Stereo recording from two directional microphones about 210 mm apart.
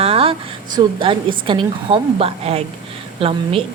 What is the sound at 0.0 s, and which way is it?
A woman's voice, 25° right (ahead or behind).